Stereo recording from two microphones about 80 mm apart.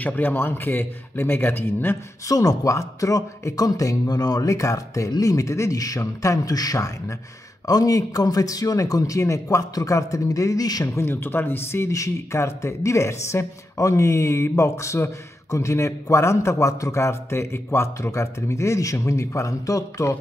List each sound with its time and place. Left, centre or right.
0.0 s speech: left
2.2 s a man's voice: left
11.0 s speech: left